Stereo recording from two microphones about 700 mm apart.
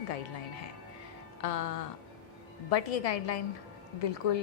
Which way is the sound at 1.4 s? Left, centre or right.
Left.